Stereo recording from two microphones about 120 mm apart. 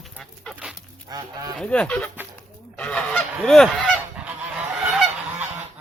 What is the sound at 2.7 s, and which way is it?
Goose, 10° left (ahead or behind).